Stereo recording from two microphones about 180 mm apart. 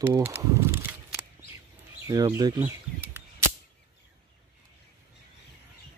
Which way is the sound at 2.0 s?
20° right (ahead or behind).